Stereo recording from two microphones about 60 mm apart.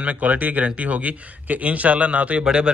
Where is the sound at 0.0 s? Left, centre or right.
Right.